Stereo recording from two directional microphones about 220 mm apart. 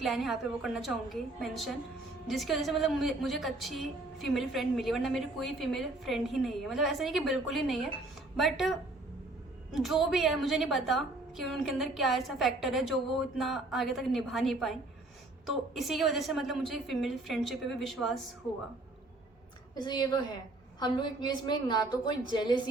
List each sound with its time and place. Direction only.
0.0 s a woman's voice: centre (ahead or behind)
19.7 s a woman's voice: 20° left (ahead or behind)